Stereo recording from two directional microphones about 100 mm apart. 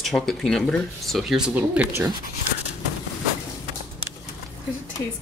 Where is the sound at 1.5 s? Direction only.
15° right (ahead or behind).